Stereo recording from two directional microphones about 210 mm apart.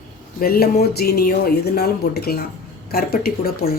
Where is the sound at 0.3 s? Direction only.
45° left (ahead or behind).